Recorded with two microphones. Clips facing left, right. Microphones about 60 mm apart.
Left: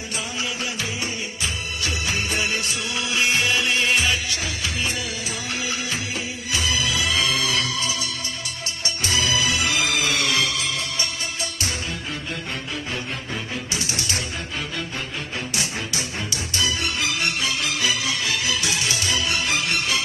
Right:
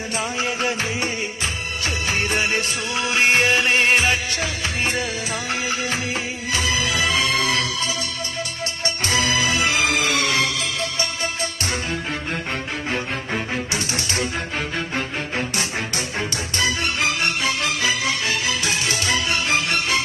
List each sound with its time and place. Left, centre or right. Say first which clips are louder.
0.2 s music: right 5 dB; right
8.8 s music: right 2 dB; right
12.9 s music: right 7 dB; right